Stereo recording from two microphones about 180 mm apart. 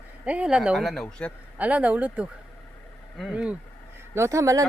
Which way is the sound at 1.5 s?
5° right (ahead or behind).